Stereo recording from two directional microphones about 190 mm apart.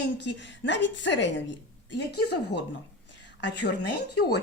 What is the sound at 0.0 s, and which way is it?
A woman's voice, 65° left (ahead or behind).